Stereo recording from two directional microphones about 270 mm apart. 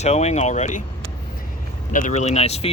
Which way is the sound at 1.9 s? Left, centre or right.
Left.